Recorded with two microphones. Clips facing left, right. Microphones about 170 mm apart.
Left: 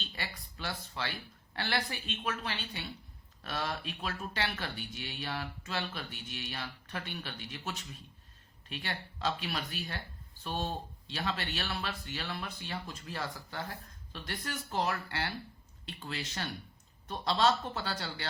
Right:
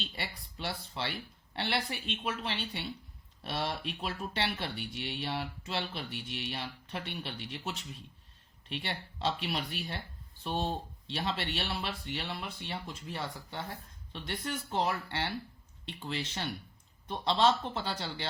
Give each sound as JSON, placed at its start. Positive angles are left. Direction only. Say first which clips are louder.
{"t": 0.0, "sound": "speech", "louder": "right 2 dB", "side_deg": -30}
{"t": 8.7, "sound": "speech", "louder": "right 2 dB", "side_deg": -25}